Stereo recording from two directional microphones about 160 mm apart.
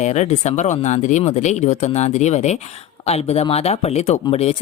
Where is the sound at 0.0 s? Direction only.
45° left (ahead or behind).